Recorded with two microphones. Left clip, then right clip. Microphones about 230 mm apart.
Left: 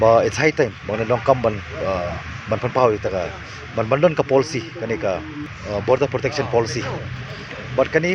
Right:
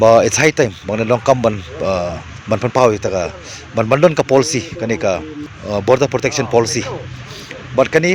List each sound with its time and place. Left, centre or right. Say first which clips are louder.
0.0 s a man's voice: right 5 dB; right